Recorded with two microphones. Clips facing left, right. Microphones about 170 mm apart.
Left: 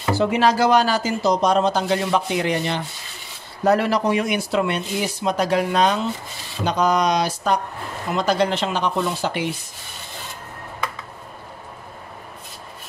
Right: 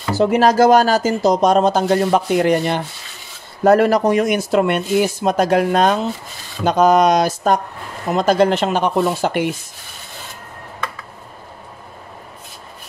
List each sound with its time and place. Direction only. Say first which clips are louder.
0.1 s speech: right 4 dB; 45° right (ahead or behind)